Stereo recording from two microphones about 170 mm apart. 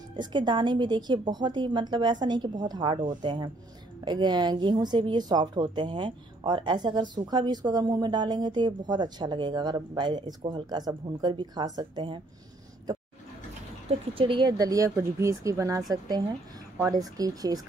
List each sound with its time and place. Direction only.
0.1 s speech: 25° right (ahead or behind)
13.8 s speech: 30° right (ahead or behind)